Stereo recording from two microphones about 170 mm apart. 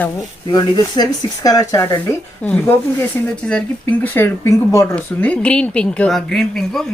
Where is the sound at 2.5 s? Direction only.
5° left (ahead or behind).